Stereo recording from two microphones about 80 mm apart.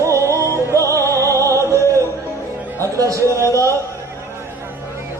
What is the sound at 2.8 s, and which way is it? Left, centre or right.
Music, right.